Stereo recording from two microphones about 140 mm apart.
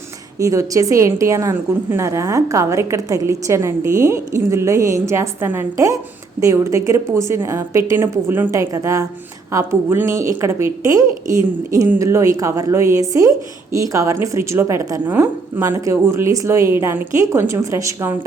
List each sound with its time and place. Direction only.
0.3 s a woman's voice: 25° right (ahead or behind)